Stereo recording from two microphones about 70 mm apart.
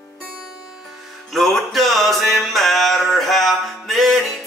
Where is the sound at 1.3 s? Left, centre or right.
Centre.